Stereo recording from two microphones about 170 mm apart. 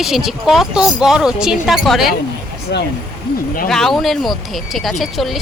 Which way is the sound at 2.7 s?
85° left.